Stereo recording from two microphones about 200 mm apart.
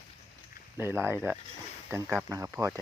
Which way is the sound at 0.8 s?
10° right (ahead or behind).